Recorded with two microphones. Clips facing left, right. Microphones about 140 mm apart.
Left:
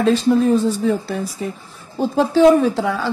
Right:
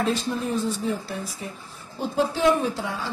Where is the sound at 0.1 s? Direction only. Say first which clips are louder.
Left 11 dB; 90° left.